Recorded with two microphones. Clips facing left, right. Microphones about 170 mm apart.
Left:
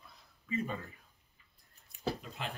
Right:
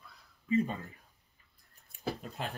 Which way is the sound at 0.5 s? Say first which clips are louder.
Right 7 dB; 35° right (ahead or behind).